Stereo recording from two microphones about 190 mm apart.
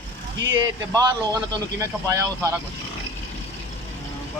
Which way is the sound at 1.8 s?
15° right (ahead or behind).